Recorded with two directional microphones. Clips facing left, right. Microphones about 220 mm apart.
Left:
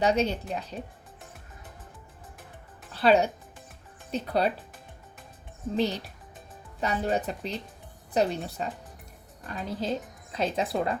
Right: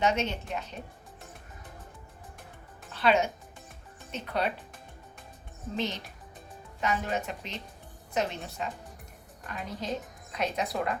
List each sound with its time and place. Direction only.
0.0 s a woman's voice: 35° left (ahead or behind)
2.9 s a woman's voice: 35° left (ahead or behind)
5.7 s a woman's voice: 35° left (ahead or behind)